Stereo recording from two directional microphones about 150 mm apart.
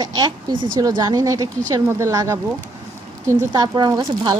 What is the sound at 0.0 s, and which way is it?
Speech, 30° right (ahead or behind).